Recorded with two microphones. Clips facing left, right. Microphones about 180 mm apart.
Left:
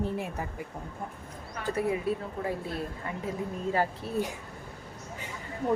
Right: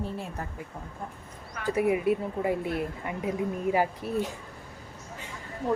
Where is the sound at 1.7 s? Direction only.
15° right (ahead or behind).